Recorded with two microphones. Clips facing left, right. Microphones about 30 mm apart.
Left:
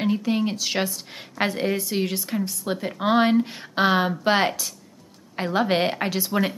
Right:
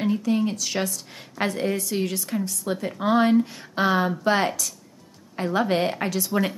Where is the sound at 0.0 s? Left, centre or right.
Left.